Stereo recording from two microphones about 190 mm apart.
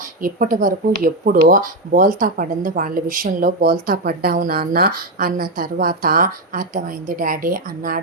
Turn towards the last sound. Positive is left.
turn(degrees=-45)  # may be behind; listen again after turning